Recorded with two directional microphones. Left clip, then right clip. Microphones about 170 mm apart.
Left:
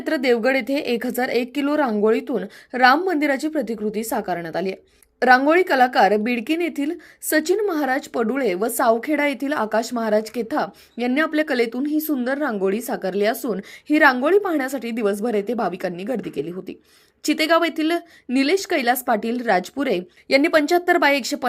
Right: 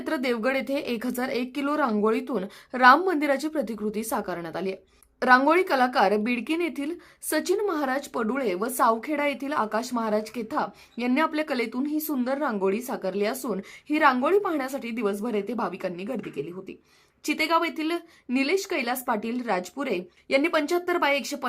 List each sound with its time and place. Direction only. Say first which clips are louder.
0.0 s a woman's voice: left 7 dB; 10° left (ahead or behind)